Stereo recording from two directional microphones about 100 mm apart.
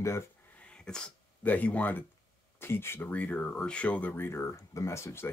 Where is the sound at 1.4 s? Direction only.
15° left (ahead or behind).